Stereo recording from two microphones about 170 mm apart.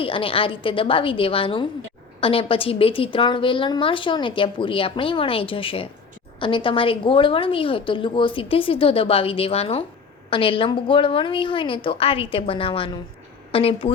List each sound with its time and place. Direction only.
0.0 s a woman's voice: 30° left (ahead or behind)